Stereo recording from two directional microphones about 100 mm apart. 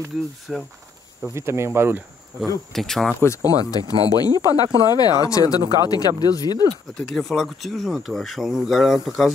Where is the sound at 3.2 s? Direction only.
35° left (ahead or behind).